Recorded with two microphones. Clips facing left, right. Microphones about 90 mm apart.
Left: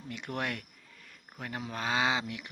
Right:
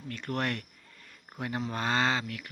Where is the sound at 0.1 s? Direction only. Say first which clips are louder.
Right 3 dB; 15° left (ahead or behind).